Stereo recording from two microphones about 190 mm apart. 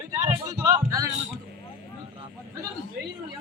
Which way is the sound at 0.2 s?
15° right (ahead or behind).